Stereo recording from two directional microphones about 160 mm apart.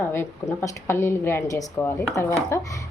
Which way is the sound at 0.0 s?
15° left (ahead or behind).